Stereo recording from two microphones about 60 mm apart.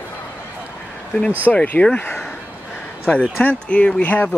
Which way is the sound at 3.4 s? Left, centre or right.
Left.